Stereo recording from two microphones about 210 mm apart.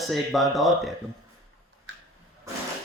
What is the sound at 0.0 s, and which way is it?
Speech, centre (ahead or behind).